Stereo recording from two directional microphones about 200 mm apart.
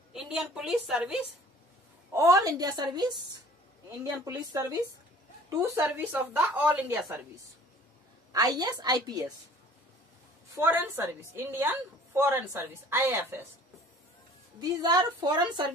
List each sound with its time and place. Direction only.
0.1 s a woman's voice: centre (ahead or behind)
2.1 s a woman's voice: 15° right (ahead or behind)
8.3 s a woman's voice: 20° right (ahead or behind)
10.5 s a woman's voice: 10° right (ahead or behind)
14.6 s a woman's voice: 20° right (ahead or behind)